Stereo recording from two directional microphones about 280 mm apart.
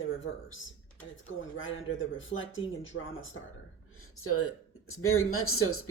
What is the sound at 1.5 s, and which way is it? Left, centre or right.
Speech, left.